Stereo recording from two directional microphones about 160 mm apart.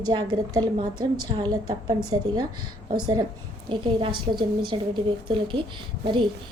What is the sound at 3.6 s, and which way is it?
A woman's voice, 30° right (ahead or behind).